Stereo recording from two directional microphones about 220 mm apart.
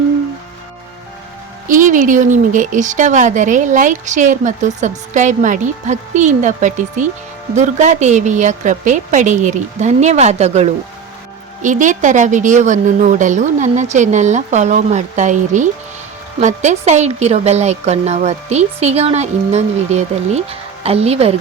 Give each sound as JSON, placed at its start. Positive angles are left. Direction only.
{"t": 1.6, "sound": "a woman's voice", "side_deg": -35}